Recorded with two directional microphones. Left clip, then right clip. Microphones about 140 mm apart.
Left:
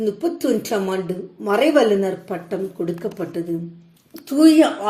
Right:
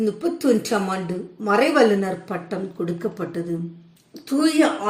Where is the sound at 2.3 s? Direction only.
45° left (ahead or behind).